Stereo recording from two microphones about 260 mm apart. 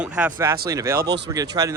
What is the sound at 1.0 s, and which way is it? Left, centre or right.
Speech, right.